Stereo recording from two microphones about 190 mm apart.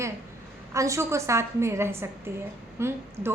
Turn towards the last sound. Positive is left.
turn(degrees=-15)  # may be behind; listen again after turning